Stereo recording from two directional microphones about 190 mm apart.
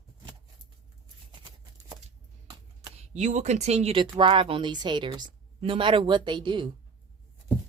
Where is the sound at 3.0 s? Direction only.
40° right (ahead or behind).